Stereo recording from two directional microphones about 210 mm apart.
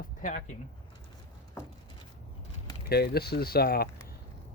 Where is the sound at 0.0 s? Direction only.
40° left (ahead or behind).